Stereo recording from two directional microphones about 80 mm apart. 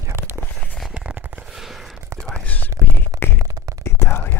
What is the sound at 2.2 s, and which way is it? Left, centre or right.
Whispering, centre.